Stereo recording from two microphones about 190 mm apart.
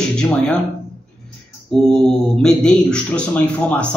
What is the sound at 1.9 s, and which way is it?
Speech, 5° left (ahead or behind).